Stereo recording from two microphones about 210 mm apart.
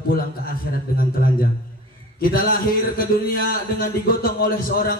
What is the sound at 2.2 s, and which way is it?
A man's voice, 45° left (ahead or behind).